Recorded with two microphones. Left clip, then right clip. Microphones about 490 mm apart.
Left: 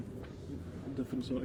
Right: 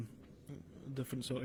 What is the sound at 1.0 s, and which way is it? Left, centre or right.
Speech, right.